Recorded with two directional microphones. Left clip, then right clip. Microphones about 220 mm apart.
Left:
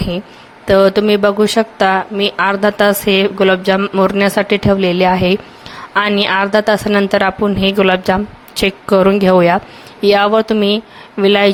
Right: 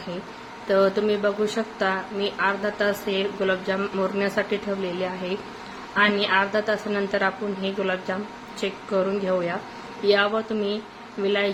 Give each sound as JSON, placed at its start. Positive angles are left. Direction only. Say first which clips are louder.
{"t": 0.7, "sound": "a woman's voice", "louder": "left 11 dB", "side_deg": 45}